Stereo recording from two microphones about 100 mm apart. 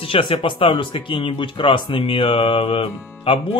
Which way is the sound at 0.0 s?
60° left (ahead or behind).